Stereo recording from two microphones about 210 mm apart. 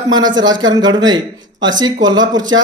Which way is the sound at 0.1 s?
20° right (ahead or behind).